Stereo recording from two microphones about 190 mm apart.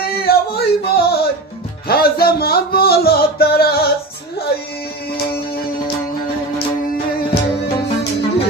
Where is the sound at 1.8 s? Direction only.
55° left (ahead or behind).